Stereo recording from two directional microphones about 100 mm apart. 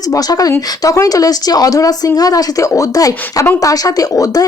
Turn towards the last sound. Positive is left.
turn(degrees=35)  # may be behind; listen again after turning